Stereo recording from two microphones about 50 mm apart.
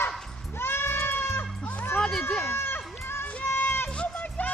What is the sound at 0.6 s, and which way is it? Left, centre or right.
Goat, left.